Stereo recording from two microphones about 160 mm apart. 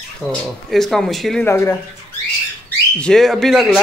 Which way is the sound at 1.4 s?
15° left (ahead or behind).